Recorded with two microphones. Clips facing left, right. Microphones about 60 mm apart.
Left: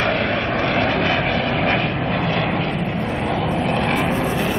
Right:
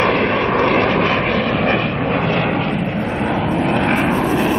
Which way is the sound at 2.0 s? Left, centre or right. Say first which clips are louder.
Right 3 dB; right.